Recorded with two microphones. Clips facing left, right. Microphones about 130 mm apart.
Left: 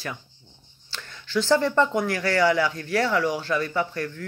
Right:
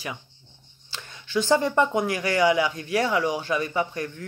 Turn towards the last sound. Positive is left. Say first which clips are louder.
# even
turn(degrees=-20)  # may be behind; listen again after turning